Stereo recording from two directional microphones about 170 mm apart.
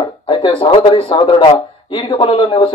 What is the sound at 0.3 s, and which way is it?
A man's voice, 30° left (ahead or behind).